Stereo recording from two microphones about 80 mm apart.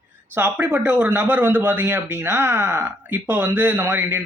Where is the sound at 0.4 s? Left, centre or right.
Right.